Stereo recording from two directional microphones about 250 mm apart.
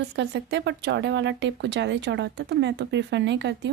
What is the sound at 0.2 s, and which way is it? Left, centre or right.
Speech, right.